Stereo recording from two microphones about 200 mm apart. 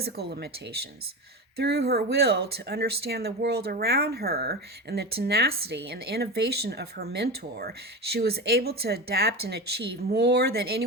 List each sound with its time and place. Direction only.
0.0 s speech: 55° right (ahead or behind)